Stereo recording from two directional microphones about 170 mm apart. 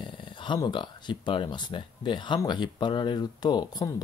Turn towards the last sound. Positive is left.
turn(degrees=25)  # may be behind; listen again after turning